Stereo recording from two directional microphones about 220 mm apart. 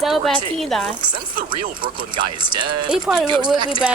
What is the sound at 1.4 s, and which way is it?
Speech, 40° right (ahead or behind).